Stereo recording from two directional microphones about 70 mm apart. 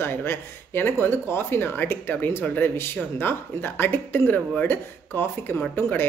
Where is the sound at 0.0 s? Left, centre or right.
Left.